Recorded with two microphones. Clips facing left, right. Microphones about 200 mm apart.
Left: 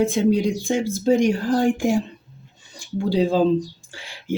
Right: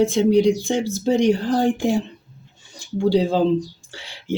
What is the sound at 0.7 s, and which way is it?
Speech, 20° right (ahead or behind).